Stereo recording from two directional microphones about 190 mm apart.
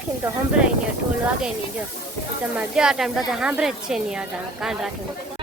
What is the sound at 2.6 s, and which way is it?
Speech, 5° right (ahead or behind).